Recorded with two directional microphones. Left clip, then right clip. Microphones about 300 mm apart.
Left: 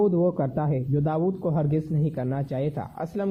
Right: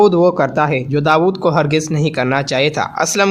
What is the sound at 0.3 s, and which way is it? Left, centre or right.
Speech, centre.